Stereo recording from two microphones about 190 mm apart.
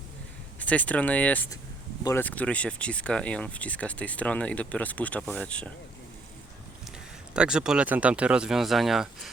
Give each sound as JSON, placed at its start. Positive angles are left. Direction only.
{"t": 0.6, "sound": "speech", "side_deg": 10}
{"t": 7.3, "sound": "speech", "side_deg": -5}